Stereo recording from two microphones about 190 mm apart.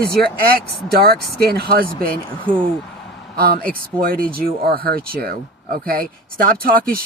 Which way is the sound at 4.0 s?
50° right (ahead or behind).